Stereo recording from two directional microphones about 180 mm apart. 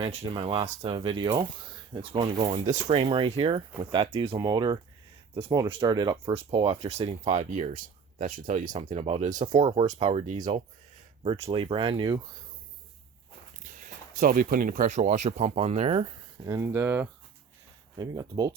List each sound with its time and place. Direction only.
0.0 s speech: 30° right (ahead or behind)
13.7 s speech: 50° right (ahead or behind)
16.5 s speech: 15° right (ahead or behind)
17.9 s speech: 20° right (ahead or behind)